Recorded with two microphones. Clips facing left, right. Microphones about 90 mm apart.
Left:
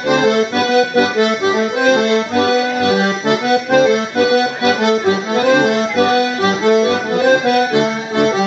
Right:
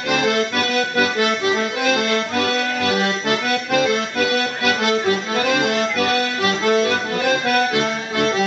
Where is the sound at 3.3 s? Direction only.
25° left (ahead or behind).